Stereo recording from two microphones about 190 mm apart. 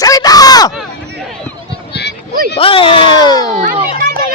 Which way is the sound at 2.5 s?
30° left (ahead or behind).